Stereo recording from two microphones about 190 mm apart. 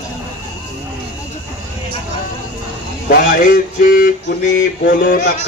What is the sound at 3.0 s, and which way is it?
Speech, 45° left (ahead or behind).